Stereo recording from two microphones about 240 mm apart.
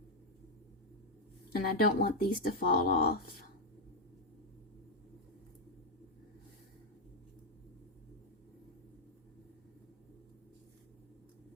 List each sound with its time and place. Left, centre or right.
1.5 s speech: left